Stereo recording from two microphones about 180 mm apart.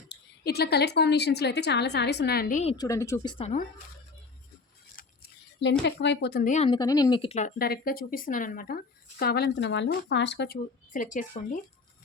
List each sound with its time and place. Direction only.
0.1 s a woman's voice: 65° left (ahead or behind)
2.7 s speech: 20° left (ahead or behind)
4.9 s a sound: 65° left (ahead or behind)
5.8 s a woman's voice: 80° left
6.4 s speech: 40° left (ahead or behind)
6.7 s speech: 20° left (ahead or behind)
7.6 s a woman's voice: 55° left (ahead or behind)
10.9 s speech: 45° left (ahead or behind)